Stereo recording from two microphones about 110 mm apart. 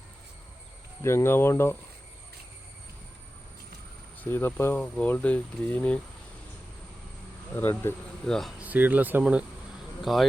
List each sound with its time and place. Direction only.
1.0 s speech: 25° left (ahead or behind)
4.2 s speech: 20° left (ahead or behind)
7.5 s speech: 20° left (ahead or behind)
8.3 s speech: centre (ahead or behind)
8.5 s speech: 15° right (ahead or behind)
10.0 s speech: centre (ahead or behind)